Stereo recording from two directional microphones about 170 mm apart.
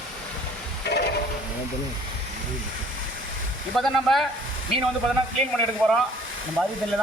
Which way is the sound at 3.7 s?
Centre (ahead or behind).